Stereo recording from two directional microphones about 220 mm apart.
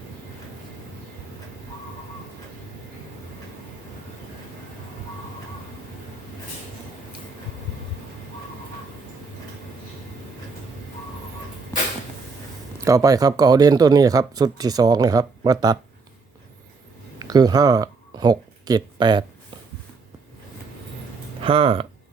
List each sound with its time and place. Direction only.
12.8 s speech: 15° right (ahead or behind)
17.2 s speech: 15° right (ahead or behind)
21.4 s speech: 25° right (ahead or behind)